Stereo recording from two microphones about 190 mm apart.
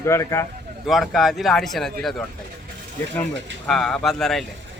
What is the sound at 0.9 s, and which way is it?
Speech, centre (ahead or behind).